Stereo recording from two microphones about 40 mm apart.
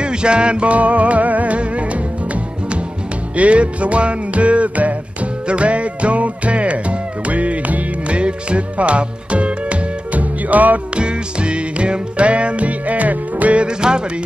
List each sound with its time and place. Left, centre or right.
0.0 s music: right
3.3 s music: right
11.0 s music: right
13.7 s music: right